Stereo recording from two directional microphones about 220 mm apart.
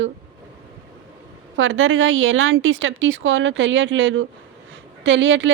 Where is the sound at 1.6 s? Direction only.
60° right (ahead or behind).